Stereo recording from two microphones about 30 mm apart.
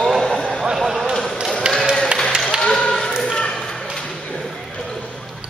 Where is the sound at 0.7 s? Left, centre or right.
Centre.